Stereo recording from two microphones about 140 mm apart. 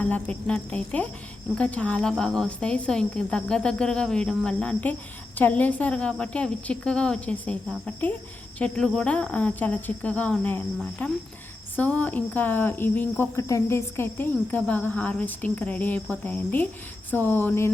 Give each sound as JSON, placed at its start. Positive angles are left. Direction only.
{"t": 0.0, "sound": "speech", "side_deg": 10}